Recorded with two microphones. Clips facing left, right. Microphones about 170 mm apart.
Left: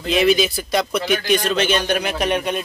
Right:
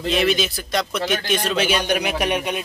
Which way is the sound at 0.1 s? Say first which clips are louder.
Left 5 dB; centre (ahead or behind).